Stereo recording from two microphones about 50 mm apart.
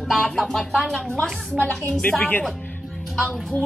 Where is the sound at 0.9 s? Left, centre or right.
Left.